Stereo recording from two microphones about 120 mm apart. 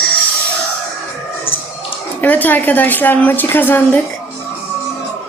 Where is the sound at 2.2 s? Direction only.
15° left (ahead or behind).